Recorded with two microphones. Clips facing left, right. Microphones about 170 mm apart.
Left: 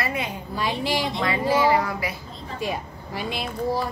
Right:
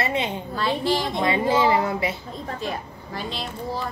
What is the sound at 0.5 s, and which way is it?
Speech, 10° left (ahead or behind).